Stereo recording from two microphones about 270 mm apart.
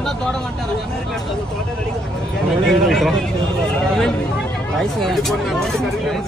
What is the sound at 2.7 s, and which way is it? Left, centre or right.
Speech, centre.